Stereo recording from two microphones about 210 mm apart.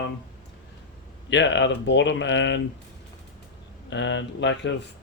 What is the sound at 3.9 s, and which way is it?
Speech, 60° left (ahead or behind).